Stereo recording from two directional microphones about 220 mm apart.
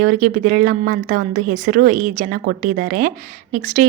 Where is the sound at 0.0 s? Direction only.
40° right (ahead or behind).